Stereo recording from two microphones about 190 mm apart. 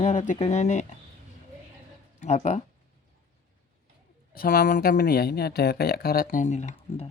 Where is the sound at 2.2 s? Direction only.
40° left (ahead or behind).